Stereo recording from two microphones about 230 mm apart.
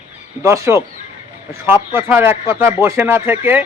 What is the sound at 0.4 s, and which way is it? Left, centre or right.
A man's voice, centre.